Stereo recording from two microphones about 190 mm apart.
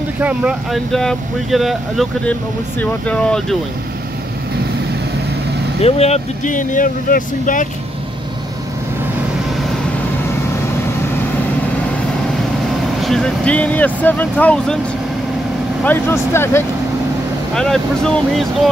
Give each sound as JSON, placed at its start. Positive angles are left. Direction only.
{"t": 0.2, "sound": "speech", "side_deg": -5}
{"t": 5.8, "sound": "speech", "side_deg": 35}
{"t": 13.0, "sound": "speech", "side_deg": 0}
{"t": 15.8, "sound": "speech", "side_deg": 10}